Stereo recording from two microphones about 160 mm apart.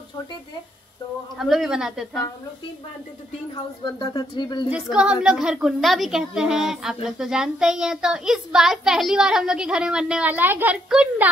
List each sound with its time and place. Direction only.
1.4 s a woman's voice: centre (ahead or behind)
3.5 s speech: 25° left (ahead or behind)
4.6 s a woman's voice: 5° right (ahead or behind)